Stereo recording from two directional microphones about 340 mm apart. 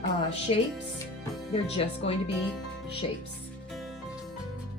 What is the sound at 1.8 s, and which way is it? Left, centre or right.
Speech, centre.